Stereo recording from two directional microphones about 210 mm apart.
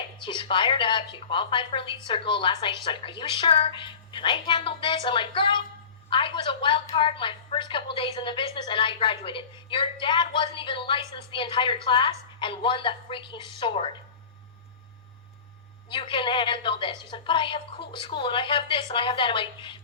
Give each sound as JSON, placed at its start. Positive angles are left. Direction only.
{"t": 0.2, "sound": "a woman's voice", "side_deg": 25}
{"t": 15.9, "sound": "a woman's voice", "side_deg": 25}